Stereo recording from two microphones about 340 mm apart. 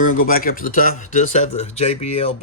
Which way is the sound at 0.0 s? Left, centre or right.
Left.